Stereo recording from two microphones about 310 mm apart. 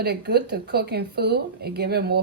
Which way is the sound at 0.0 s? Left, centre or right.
Right.